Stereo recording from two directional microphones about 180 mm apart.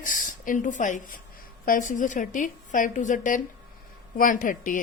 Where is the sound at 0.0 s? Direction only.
45° left (ahead or behind).